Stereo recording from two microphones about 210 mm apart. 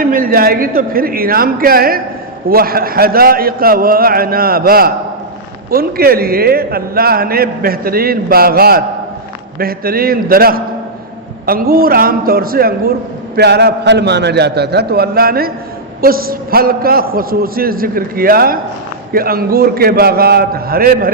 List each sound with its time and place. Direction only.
0.0 s a man's voice: 40° right (ahead or behind)